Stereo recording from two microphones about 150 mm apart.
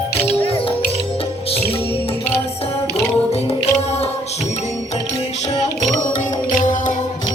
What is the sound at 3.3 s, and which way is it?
Music, 45° left (ahead or behind).